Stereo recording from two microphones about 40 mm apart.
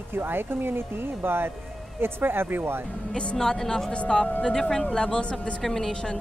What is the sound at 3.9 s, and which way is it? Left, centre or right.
Speech, left.